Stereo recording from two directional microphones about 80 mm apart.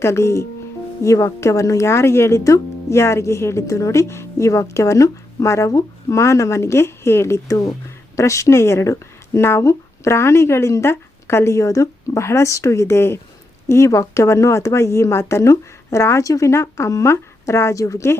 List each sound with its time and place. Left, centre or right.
0.0 s speech: left